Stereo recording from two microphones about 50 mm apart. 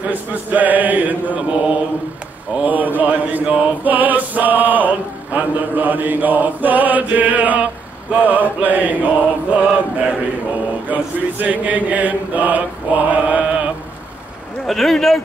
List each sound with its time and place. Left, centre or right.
0.0 s chant: right
3.4 s chant: right
3.8 s a sound: right
8.1 s chant: right
14.7 s speech: centre